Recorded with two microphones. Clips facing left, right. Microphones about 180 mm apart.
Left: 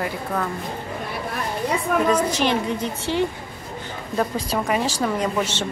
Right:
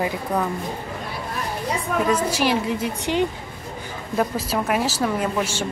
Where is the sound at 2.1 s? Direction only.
5° right (ahead or behind).